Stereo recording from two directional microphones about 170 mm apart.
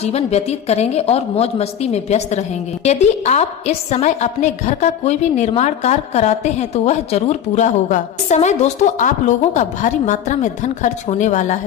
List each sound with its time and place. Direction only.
0.0 s a woman's voice: 35° left (ahead or behind)